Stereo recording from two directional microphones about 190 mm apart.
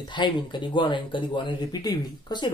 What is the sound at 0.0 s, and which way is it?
Speech, 25° left (ahead or behind).